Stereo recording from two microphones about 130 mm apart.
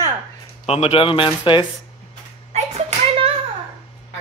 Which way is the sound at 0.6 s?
50° left (ahead or behind).